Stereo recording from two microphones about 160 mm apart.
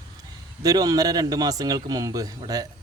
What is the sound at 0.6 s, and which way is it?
Speech, 25° right (ahead or behind).